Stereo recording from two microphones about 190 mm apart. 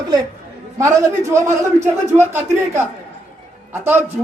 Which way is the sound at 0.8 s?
15° right (ahead or behind).